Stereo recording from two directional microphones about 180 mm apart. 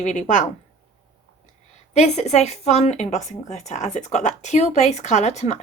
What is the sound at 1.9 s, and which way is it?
Speech, 35° left (ahead or behind).